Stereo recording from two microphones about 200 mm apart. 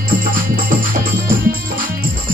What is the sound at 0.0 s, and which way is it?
Music, 45° right (ahead or behind).